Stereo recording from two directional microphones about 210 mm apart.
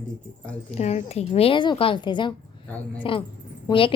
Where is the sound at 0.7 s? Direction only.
30° left (ahead or behind).